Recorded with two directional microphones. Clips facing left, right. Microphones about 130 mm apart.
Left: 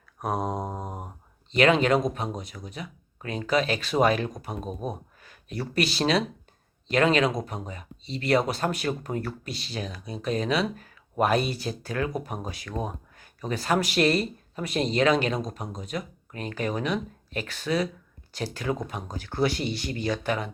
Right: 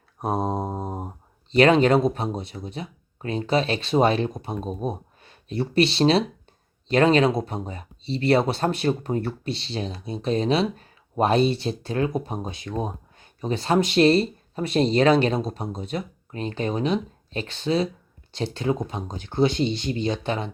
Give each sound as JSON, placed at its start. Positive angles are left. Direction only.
{"t": 0.2, "sound": "mantra", "side_deg": -25}
{"t": 1.5, "sound": "speech", "side_deg": -35}